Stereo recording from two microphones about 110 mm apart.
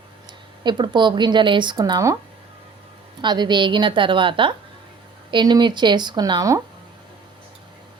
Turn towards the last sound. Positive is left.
turn(degrees=-40)  # may be behind; listen again after turning